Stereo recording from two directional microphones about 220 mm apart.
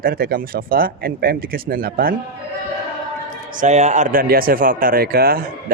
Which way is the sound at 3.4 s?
35° right (ahead or behind).